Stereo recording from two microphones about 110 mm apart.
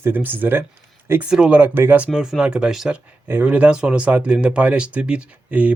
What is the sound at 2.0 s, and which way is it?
Speech, 5° right (ahead or behind).